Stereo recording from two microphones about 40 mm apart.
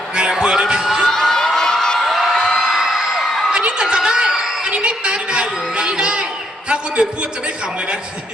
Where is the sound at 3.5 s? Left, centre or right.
Right.